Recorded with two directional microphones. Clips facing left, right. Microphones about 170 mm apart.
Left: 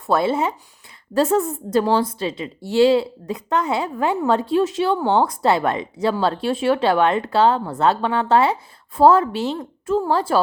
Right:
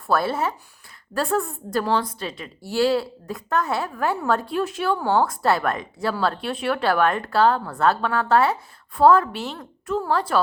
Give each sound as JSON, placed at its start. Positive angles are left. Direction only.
{"t": 0.1, "sound": "a woman's voice", "side_deg": 20}